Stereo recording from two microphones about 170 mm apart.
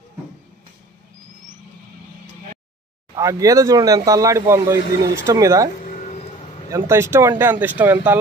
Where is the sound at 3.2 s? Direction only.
20° right (ahead or behind).